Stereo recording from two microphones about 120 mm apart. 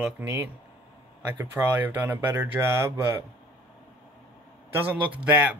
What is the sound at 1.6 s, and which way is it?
Speech, 15° right (ahead or behind).